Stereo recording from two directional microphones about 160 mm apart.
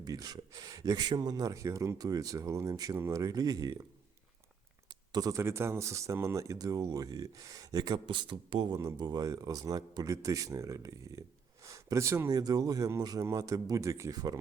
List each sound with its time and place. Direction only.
0.0 s speech: 25° right (ahead or behind)
4.9 s speech: 25° right (ahead or behind)